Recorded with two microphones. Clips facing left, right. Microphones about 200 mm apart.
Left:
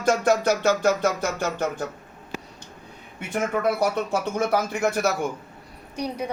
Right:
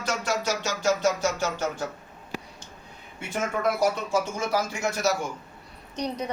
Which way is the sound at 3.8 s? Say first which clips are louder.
Left 1 dB; 60° left (ahead or behind).